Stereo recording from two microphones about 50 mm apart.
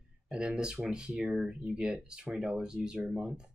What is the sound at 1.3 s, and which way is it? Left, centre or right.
Speech, centre.